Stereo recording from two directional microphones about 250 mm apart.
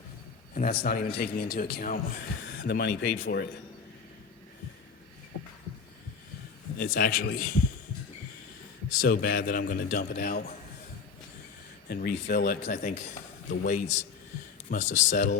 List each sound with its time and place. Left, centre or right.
0.5 s a man's voice: left
6.7 s speech: left
8.9 s speech: left
11.9 s speech: left
13.5 s speech: left
14.9 s speech: left